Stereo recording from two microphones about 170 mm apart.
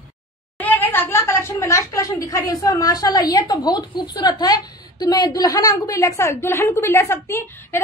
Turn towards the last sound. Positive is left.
turn(degrees=15)  # may be behind; listen again after turning